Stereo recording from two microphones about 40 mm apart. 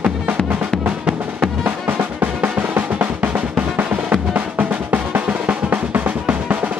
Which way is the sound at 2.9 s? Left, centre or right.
Right.